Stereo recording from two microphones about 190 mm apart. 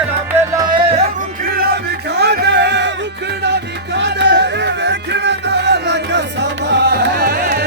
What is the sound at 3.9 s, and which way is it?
Music, 65° right (ahead or behind).